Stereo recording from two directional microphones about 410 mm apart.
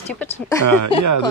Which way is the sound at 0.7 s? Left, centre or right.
Right.